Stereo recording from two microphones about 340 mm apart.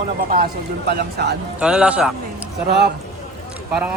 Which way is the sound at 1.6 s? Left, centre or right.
Centre.